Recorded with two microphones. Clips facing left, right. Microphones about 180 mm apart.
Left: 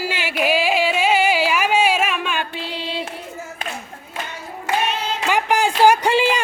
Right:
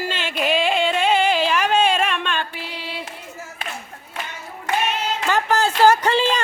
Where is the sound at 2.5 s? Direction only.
30° left (ahead or behind).